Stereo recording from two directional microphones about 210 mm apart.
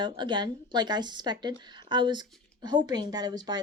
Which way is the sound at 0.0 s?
20° right (ahead or behind).